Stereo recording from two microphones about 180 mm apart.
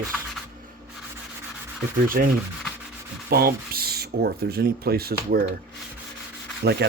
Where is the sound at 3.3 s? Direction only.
55° right (ahead or behind).